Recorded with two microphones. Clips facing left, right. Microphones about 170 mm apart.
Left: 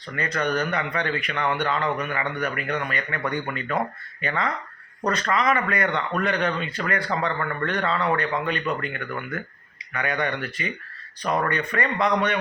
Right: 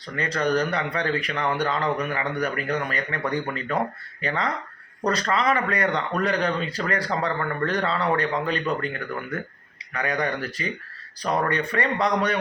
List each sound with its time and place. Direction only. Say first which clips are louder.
0.2 s a man's voice: right 2 dB; 30° right (ahead or behind)